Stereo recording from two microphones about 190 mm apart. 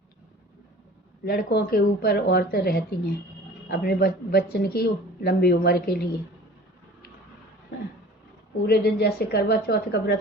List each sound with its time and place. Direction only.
1.2 s speech: 55° left (ahead or behind)
8.6 s speech: 55° left (ahead or behind)